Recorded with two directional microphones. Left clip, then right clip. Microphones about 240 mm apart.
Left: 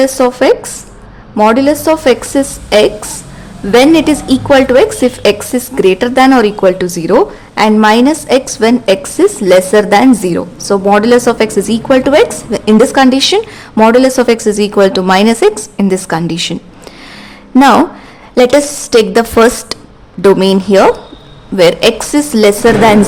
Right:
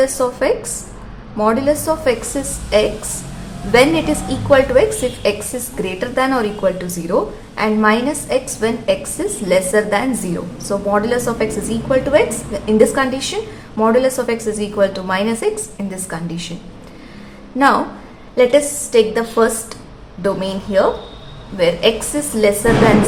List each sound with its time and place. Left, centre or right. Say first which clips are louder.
0.0 s a woman's voice: left 7 dB; left
18.3 s a woman's voice: left 5 dB; left